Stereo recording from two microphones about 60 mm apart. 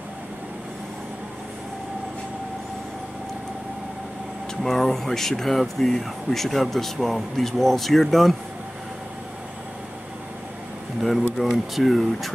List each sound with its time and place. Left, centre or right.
4.6 s speech: centre
11.0 s speech: centre